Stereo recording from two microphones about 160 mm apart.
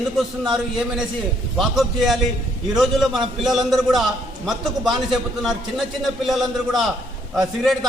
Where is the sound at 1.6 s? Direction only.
Centre (ahead or behind).